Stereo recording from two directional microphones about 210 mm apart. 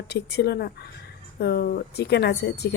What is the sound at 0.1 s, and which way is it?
Speech, 50° left (ahead or behind).